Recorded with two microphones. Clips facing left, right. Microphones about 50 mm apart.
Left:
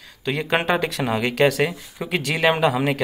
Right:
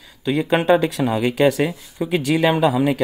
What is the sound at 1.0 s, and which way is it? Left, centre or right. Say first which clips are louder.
Speech: right 3 dB; left.